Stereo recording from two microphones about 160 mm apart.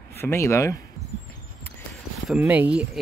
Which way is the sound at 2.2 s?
10° right (ahead or behind).